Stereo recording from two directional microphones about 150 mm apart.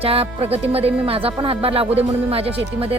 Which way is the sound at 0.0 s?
40° right (ahead or behind).